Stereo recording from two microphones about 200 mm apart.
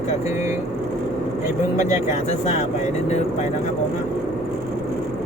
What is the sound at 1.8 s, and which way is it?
Speech, 35° left (ahead or behind).